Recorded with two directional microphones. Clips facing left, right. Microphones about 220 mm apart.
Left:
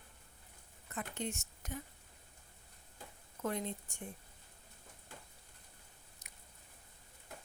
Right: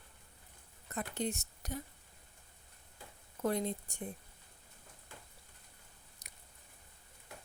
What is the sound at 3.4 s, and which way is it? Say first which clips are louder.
Speech: right 4 dB; 35° right (ahead or behind).